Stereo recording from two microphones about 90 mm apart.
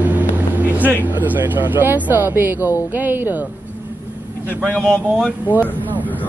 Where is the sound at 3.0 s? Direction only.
20° right (ahead or behind).